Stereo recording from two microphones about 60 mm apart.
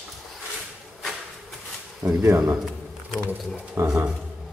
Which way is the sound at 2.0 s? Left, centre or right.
Right.